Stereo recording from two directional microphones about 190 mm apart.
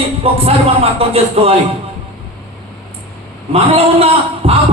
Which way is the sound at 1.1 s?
30° right (ahead or behind).